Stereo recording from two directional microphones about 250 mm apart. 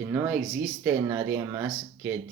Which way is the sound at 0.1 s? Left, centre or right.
Centre.